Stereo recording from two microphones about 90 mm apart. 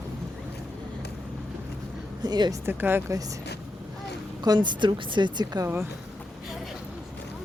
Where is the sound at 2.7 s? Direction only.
20° right (ahead or behind).